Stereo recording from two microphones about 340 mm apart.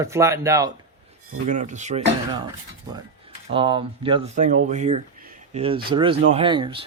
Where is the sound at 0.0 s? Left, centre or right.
Centre.